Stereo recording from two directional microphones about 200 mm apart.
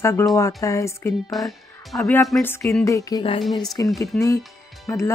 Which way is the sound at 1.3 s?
Centre (ahead or behind).